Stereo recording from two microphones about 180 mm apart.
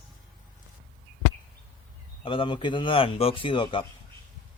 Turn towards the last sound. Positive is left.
turn(degrees=25)  # may be behind; listen again after turning